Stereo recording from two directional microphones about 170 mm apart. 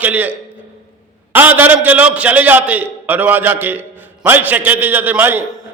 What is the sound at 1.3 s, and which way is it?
A man's voice, 10° right (ahead or behind).